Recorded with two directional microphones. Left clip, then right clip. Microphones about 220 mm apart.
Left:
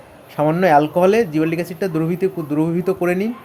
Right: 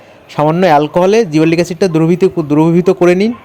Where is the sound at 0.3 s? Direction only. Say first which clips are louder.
Right 5 dB; 35° right (ahead or behind).